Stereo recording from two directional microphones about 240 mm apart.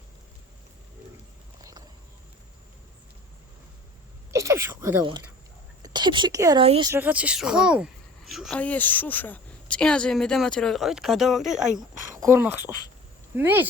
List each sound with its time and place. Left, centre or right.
4.3 s a woman's voice: centre
6.9 s speech: centre